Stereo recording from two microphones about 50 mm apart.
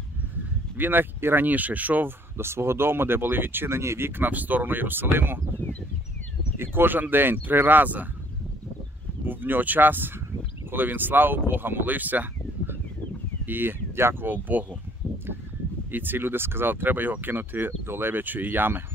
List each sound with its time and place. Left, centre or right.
0.7 s speech: right
2.3 s speech: right
3.7 s speech: right
4.2 s speech: right
6.6 s speech: right
9.2 s speech: right
13.5 s speech: right
15.9 s speech: right